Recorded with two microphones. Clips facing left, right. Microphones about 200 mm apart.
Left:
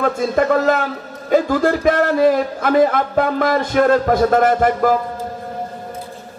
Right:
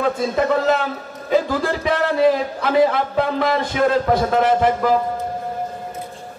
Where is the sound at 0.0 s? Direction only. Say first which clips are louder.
Left 2 dB; 45° left (ahead or behind).